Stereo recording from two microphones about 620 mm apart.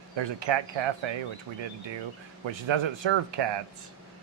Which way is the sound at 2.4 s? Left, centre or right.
Right.